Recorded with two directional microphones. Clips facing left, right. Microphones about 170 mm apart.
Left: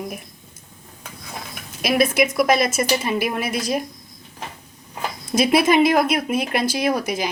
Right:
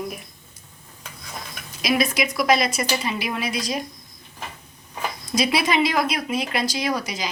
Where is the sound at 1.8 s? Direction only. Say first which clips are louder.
Left 4 dB; 55° left (ahead or behind).